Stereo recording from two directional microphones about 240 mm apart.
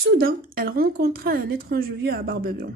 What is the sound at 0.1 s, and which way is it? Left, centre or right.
A woman's voice, right.